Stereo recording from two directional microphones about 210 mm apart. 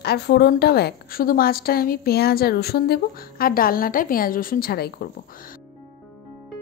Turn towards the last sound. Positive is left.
turn(degrees=45)  # may be behind; listen again after turning